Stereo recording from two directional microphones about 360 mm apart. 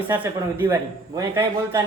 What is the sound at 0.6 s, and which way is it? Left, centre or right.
A man's voice, centre.